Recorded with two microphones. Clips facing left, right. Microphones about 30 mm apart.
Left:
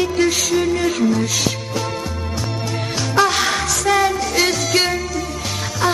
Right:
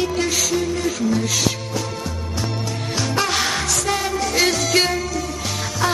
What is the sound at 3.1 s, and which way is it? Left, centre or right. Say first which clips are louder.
Music: left 6 dB; centre.